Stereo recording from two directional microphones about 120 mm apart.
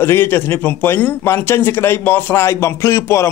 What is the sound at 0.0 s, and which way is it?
A man's voice, 20° left (ahead or behind).